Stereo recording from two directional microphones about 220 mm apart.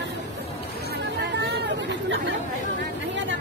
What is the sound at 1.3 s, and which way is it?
Chatter, 50° right (ahead or behind).